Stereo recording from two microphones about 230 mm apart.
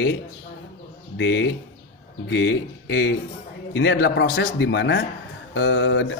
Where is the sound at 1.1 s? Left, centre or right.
Left.